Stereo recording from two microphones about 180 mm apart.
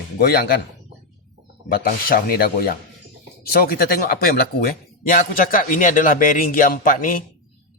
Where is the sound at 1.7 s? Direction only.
55° left (ahead or behind).